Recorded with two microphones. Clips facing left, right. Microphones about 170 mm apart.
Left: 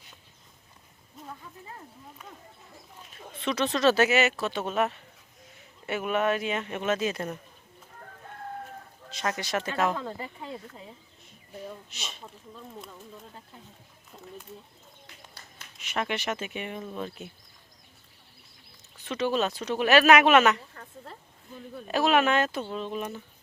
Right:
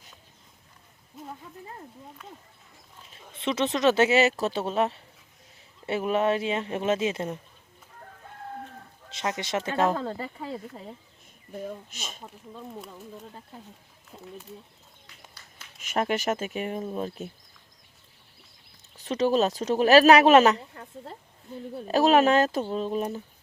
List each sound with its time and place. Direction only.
3.1 s speech: 25° right (ahead or behind)
9.0 s speech: 20° right (ahead or behind); by 10.9 s 40° right (ahead or behind)
11.5 s speech: 50° right (ahead or behind)
14.1 s speech: centre (ahead or behind)
15.8 s speech: 45° right (ahead or behind)
18.9 s speech: 40° right (ahead or behind)